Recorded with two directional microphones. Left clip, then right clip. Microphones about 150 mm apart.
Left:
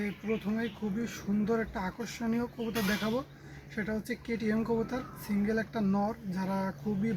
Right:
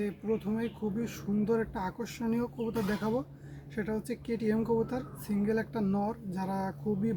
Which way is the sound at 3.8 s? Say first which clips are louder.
Even; 40° right (ahead or behind).